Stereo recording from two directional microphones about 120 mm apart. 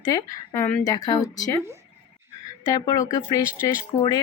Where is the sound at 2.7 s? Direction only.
30° left (ahead or behind).